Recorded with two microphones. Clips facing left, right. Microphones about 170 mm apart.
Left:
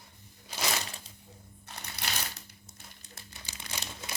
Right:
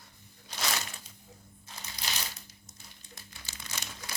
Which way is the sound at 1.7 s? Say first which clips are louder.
Left 2 dB; 65° left (ahead or behind).